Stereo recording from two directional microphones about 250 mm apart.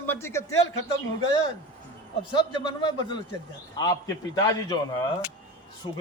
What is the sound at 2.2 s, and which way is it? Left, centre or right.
A man's voice, centre.